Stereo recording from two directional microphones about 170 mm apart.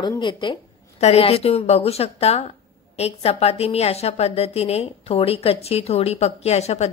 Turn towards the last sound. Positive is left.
turn(degrees=40)  # may be behind; listen again after turning